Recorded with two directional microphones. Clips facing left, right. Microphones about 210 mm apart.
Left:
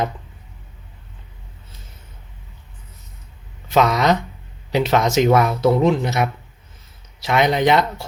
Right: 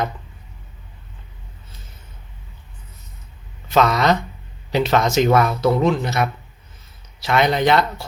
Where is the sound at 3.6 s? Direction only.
15° left (ahead or behind).